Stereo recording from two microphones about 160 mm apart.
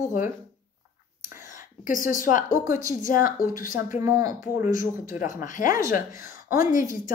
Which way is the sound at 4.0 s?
20° right (ahead or behind).